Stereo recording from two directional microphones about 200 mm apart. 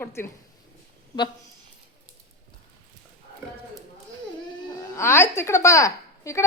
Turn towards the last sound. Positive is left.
turn(degrees=15)  # may be behind; listen again after turning